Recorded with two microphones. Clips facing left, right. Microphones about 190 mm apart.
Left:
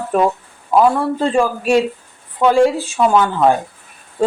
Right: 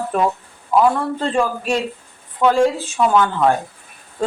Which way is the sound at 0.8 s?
10° left (ahead or behind).